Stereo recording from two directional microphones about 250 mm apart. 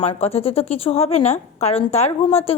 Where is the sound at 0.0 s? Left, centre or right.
Left.